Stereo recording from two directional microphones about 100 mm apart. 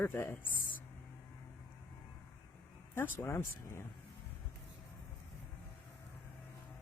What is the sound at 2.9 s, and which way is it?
Speech, 25° left (ahead or behind).